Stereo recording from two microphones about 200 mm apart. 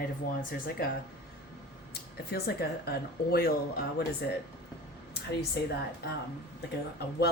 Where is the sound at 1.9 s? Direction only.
50° left (ahead or behind).